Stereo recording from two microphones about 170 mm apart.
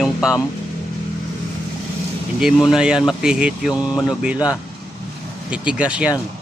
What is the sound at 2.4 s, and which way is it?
Speech, 5° right (ahead or behind).